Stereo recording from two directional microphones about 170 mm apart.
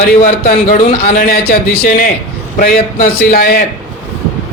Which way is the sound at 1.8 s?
55° left (ahead or behind).